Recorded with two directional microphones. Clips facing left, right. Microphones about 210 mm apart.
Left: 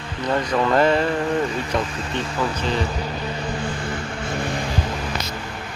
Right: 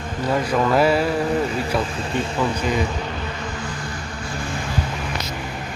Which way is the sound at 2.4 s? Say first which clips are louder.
Right 1 dB; 10° right (ahead or behind).